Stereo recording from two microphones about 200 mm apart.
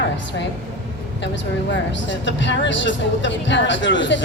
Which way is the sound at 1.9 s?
65° left (ahead or behind).